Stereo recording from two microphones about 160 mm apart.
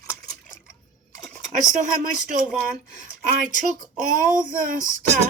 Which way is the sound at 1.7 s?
55° right (ahead or behind).